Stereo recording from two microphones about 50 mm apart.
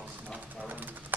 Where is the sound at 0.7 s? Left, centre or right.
Right.